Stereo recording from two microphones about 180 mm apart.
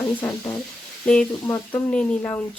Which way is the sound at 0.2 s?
20° left (ahead or behind).